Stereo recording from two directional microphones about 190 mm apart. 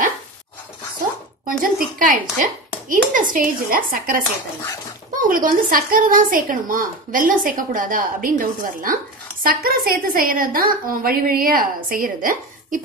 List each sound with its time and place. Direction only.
1.4 s speech: 45° right (ahead or behind)
5.2 s speech: 45° right (ahead or behind)